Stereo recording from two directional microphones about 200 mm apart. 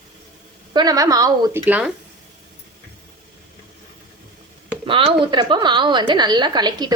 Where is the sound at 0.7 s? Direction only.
20° right (ahead or behind).